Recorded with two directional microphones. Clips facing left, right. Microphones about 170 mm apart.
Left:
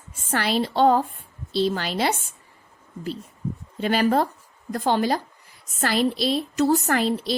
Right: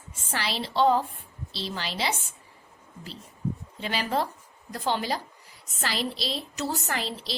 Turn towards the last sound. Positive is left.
turn(degrees=50)  # may be behind; listen again after turning